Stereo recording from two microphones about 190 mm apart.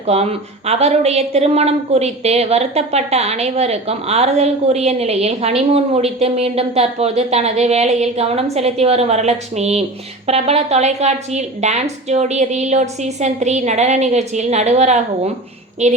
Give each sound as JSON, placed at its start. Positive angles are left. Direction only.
{"t": 0.1, "sound": "a woman's voice", "side_deg": -35}